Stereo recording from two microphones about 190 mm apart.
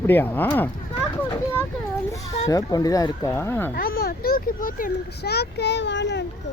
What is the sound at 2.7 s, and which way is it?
Speech, 20° left (ahead or behind).